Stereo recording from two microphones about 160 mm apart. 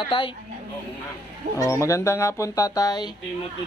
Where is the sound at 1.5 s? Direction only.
20° left (ahead or behind).